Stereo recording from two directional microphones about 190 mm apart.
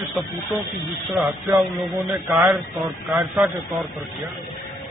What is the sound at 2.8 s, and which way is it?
Speech, 15° right (ahead or behind).